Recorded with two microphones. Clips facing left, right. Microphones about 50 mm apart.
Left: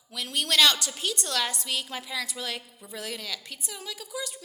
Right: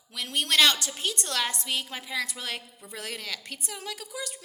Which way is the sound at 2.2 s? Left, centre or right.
Right.